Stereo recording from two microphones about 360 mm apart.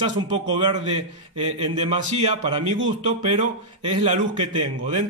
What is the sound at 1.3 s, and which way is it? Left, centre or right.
Speech, centre.